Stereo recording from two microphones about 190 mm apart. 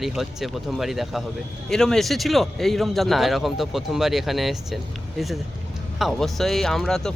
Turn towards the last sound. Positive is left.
turn(degrees=0)  # may be behind; listen again after turning